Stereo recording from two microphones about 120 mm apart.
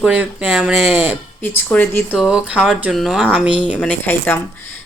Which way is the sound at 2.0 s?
5° right (ahead or behind).